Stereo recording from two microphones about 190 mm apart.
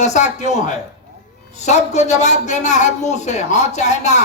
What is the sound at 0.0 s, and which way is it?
Speech, 40° left (ahead or behind).